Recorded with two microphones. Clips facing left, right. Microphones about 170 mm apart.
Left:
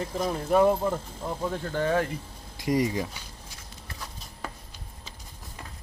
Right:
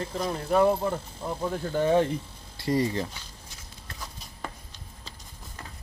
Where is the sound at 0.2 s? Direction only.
5° left (ahead or behind).